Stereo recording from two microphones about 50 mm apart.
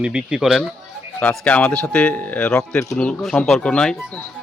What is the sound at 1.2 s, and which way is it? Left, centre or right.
Speech, left.